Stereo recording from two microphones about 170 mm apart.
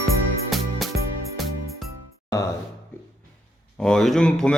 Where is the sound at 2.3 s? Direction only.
20° left (ahead or behind).